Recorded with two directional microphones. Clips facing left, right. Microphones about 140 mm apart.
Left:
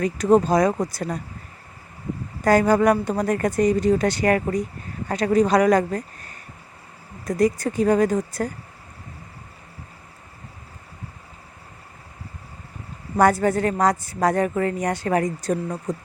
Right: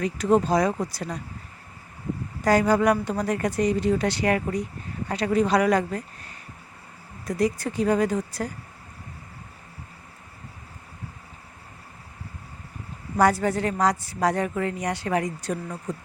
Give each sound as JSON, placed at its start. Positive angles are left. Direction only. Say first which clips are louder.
{"t": 0.0, "sound": "speech", "louder": "left 4 dB", "side_deg": 45}
{"t": 2.4, "sound": "speech", "louder": "left 3 dB", "side_deg": 50}
{"t": 13.1, "sound": "speech", "louder": "left 3 dB", "side_deg": 50}